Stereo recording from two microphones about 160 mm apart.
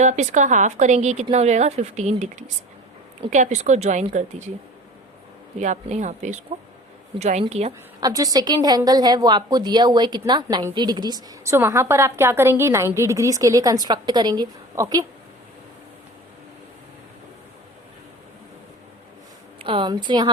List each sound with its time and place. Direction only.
0.0 s a woman's voice: 50° right (ahead or behind)
5.5 s a woman's voice: 50° right (ahead or behind)
8.0 s a woman's voice: 25° right (ahead or behind)
19.6 s a woman's voice: 30° right (ahead or behind)